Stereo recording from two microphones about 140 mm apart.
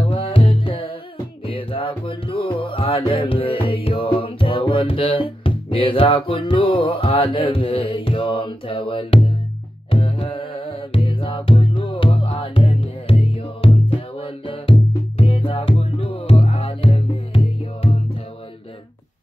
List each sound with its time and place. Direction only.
0.1 s music: 40° left (ahead or behind)